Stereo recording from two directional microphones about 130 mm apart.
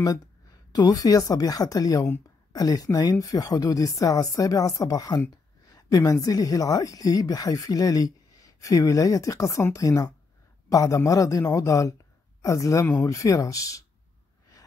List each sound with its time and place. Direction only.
0.7 s speech: 30° left (ahead or behind)
5.7 s a sound: 25° left (ahead or behind)
6.2 s speech: 30° left (ahead or behind)